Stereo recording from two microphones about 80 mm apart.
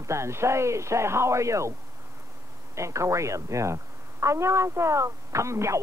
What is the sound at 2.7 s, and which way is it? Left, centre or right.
Speech, right.